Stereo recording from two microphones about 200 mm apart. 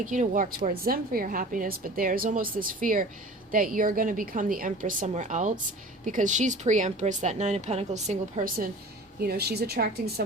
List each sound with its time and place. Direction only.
0.0 s a woman's voice: 40° right (ahead or behind)